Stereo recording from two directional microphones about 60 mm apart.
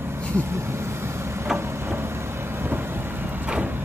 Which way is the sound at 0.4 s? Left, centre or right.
Right.